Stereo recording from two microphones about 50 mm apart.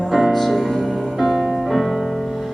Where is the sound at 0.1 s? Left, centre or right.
Centre.